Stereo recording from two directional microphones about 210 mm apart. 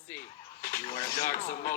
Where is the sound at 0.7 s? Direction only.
50° left (ahead or behind).